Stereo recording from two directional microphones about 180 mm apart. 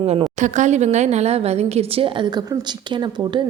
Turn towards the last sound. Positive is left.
turn(degrees=-25)  # may be behind; listen again after turning